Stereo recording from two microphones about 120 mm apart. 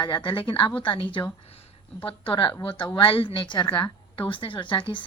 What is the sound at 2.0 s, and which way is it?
A woman's voice, 45° left (ahead or behind).